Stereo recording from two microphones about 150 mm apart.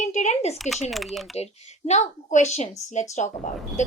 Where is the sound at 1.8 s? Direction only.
50° left (ahead or behind).